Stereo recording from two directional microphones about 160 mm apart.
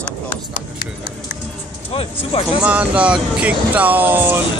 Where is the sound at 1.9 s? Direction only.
35° left (ahead or behind).